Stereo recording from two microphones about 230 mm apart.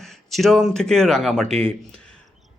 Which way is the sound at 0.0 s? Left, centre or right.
Centre.